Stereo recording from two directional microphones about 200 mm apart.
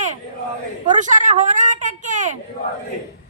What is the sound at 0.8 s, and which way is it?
A woman's voice, 40° right (ahead or behind).